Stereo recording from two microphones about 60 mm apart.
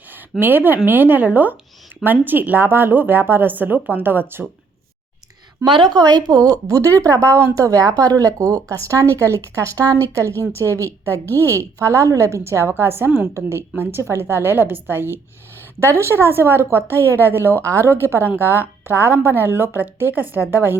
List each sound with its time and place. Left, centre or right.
0.3 s speech: right
5.6 s a woman's voice: right
6.0 s speech: right
6.9 s speech: left
7.2 s a woman's voice: right
7.5 s a woman's voice: right
9.7 s speech: right
10.2 s a woman's voice: left
11.8 s a woman's voice: right
17.0 s a woman's voice: left
17.2 s a woman's voice: right
18.3 s speech: right